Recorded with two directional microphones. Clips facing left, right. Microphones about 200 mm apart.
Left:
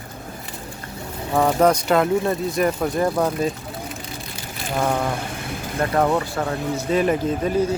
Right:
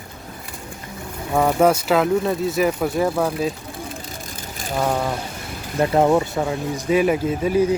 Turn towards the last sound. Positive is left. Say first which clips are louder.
# right 2 dB
turn(degrees=-10)  # may be behind; listen again after turning